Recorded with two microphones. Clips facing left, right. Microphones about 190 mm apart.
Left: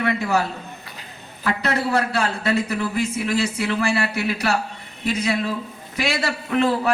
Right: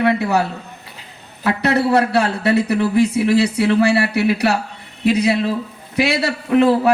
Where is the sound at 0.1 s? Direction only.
65° right (ahead or behind).